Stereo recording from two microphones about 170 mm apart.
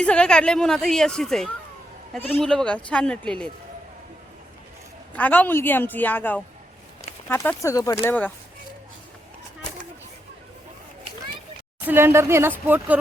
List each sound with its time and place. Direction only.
0.0 s speech: 5° left (ahead or behind)
5.1 s a woman's voice: 10° left (ahead or behind)
11.9 s speech: 15° right (ahead or behind)